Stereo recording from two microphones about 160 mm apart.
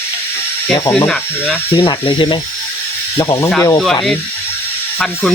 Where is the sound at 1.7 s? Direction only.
30° left (ahead or behind).